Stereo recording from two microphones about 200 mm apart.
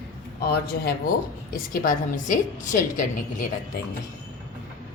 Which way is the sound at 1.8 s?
40° left (ahead or behind).